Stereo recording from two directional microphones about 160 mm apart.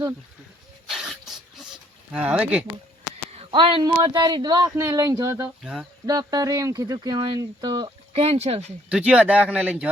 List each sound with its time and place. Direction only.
0.9 s a sound: centre (ahead or behind)
2.1 s speech: 5° right (ahead or behind)
3.3 s speech: 30° right (ahead or behind)
8.9 s speech: 5° right (ahead or behind)